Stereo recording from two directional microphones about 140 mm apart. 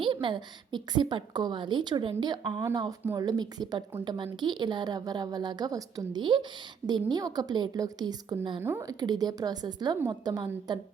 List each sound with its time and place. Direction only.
0.0 s a woman's voice: 35° right (ahead or behind)